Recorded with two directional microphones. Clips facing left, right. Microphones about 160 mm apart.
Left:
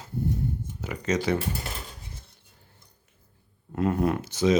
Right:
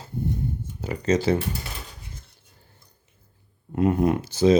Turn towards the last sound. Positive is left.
turn(degrees=-30)  # may be behind; listen again after turning